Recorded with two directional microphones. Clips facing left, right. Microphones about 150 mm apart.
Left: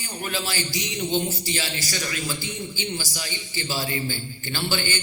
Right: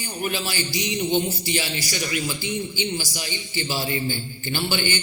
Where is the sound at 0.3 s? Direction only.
15° right (ahead or behind).